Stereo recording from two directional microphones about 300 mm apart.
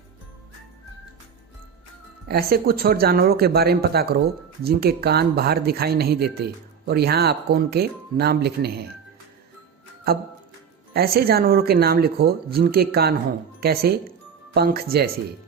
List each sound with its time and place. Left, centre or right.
2.2 s speech: right
10.1 s speech: right